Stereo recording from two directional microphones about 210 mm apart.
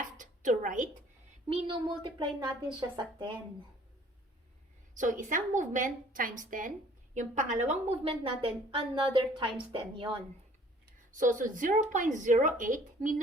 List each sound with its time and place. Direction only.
0.2 s a sound: 40° right (ahead or behind)
1.5 s a woman's voice: 25° right (ahead or behind)
4.9 s a woman's voice: 40° right (ahead or behind)
11.1 s a woman's voice: 40° right (ahead or behind)